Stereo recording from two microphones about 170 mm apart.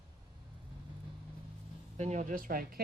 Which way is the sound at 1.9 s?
45° right (ahead or behind).